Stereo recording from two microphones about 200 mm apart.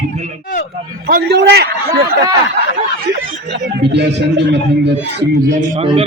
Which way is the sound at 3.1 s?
55° right (ahead or behind).